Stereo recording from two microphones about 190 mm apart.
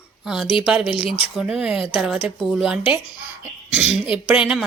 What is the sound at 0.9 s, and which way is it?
Speech, 30° left (ahead or behind).